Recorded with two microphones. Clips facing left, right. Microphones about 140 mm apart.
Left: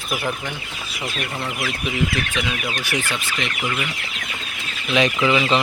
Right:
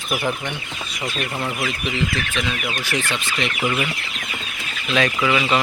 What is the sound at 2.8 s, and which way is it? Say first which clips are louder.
Speech: right 2 dB; 10° left (ahead or behind).